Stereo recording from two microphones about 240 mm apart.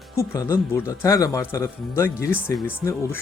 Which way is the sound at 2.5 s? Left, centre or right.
Centre.